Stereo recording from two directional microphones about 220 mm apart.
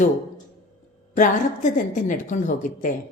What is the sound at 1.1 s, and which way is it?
A woman's voice, 35° left (ahead or behind).